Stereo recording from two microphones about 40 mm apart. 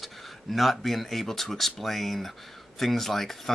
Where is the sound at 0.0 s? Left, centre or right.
Centre.